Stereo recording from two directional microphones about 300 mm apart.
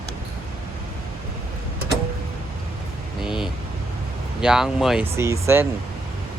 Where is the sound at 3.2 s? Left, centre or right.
Centre.